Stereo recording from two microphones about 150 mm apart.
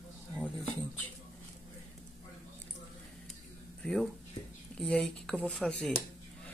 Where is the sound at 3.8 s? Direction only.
5° left (ahead or behind).